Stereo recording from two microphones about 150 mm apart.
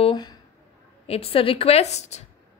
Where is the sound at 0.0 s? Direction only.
30° left (ahead or behind).